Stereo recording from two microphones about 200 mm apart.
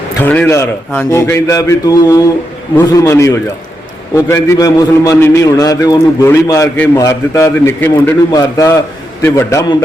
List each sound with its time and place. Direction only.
0.2 s a man's voice: 10° left (ahead or behind)